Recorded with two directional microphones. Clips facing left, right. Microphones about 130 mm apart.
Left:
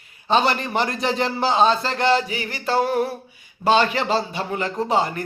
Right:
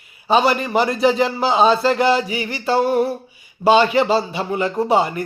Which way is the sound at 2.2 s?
45° left (ahead or behind).